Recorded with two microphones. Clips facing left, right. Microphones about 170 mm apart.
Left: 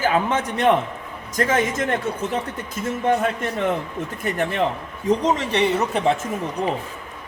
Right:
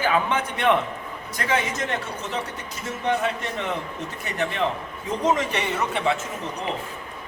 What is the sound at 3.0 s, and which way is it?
Speech, 50° left (ahead or behind).